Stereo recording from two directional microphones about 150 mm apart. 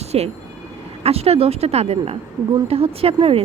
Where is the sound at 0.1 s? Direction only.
40° right (ahead or behind).